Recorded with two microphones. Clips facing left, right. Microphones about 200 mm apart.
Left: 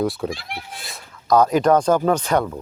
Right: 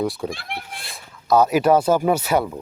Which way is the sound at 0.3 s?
55° right (ahead or behind).